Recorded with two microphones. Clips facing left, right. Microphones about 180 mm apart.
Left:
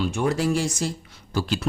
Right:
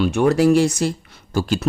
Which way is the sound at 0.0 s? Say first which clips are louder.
Right 8 dB; 65° right (ahead or behind).